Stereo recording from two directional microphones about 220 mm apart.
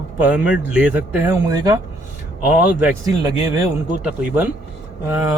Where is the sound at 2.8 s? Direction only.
15° right (ahead or behind).